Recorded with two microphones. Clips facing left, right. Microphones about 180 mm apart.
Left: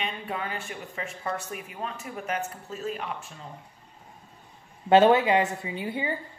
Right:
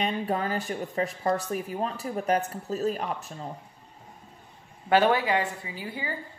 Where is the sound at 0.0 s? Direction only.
40° right (ahead or behind).